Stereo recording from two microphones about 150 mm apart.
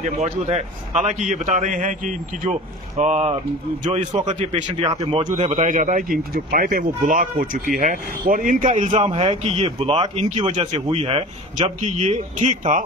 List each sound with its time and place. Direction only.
0.0 s a man's voice: 50° right (ahead or behind)
5.1 s a man's voice: 40° right (ahead or behind); by 12.8 s 55° right (ahead or behind)